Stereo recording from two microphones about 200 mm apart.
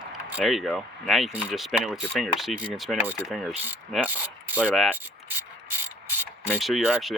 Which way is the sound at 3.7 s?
10° right (ahead or behind).